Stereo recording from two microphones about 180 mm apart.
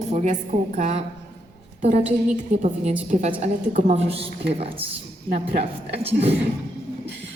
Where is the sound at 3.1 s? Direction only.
45° right (ahead or behind).